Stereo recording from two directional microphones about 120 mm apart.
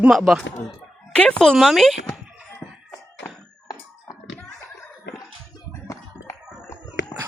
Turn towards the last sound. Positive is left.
turn(degrees=25)  # may be behind; listen again after turning